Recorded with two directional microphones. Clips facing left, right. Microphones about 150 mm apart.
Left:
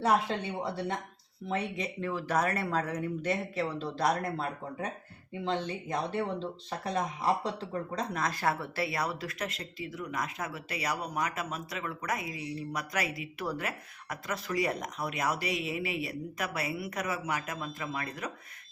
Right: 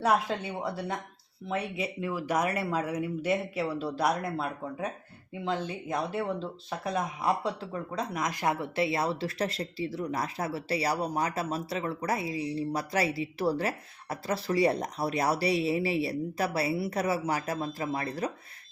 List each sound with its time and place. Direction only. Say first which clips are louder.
0.0 s speech: right 1 dB; centre (ahead or behind)
8.2 s speech: right 2 dB; 15° right (ahead or behind); by 18.3 s 30° right (ahead or behind)